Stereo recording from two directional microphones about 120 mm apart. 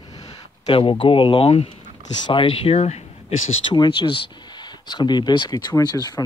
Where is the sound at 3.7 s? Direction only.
40° left (ahead or behind).